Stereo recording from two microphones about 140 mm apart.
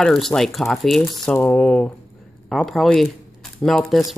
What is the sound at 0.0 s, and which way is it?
Speech, 5° left (ahead or behind).